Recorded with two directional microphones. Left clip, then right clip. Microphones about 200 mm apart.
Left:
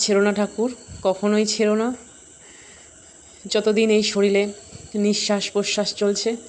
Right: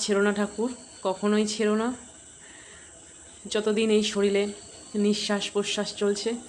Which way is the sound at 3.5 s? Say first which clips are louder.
Left 6 dB; 20° left (ahead or behind).